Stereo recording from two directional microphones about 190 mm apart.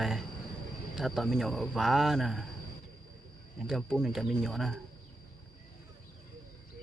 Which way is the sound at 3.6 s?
Centre (ahead or behind).